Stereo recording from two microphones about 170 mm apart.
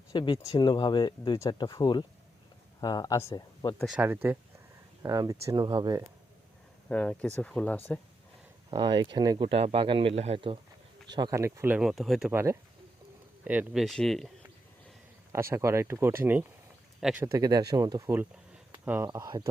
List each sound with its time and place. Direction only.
0.1 s speech: 30° left (ahead or behind)
3.8 s speech: 10° right (ahead or behind); by 6.0 s 25° right (ahead or behind)
6.8 s speech: 5° left (ahead or behind)
8.7 s speech: 25° right (ahead or behind)
11.1 s speech: 20° right (ahead or behind); by 12.3 s centre (ahead or behind)
12.3 s speech: 15° right (ahead or behind)
13.8 s speech: centre (ahead or behind)
15.3 s speech: 15° right (ahead or behind)
17.2 s speech: 20° right (ahead or behind)